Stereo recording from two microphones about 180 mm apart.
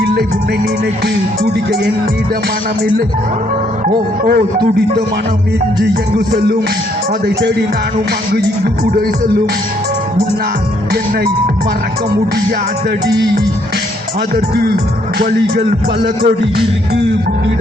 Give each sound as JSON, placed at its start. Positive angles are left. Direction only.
{"t": 1.0, "sound": "music", "side_deg": -65}
{"t": 4.2, "sound": "music", "side_deg": -55}
{"t": 5.9, "sound": "music", "side_deg": -60}
{"t": 8.3, "sound": "music", "side_deg": -60}
{"t": 14.3, "sound": "music", "side_deg": -60}